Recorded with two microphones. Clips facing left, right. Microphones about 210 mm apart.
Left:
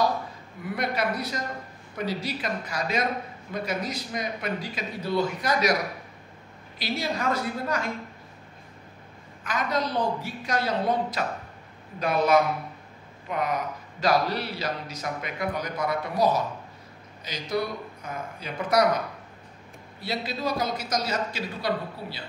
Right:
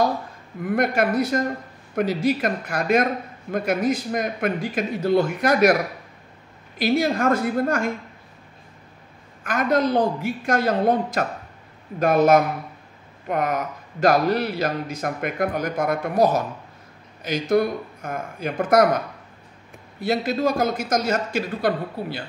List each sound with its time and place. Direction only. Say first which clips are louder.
0.7 s speech: right 7 dB; 50° right (ahead or behind)
6.8 s speech: right 9 dB; 50° right (ahead or behind)
9.4 s a woman's voice: right 7 dB; 50° right (ahead or behind)
20.0 s speech: right 9 dB; 50° right (ahead or behind)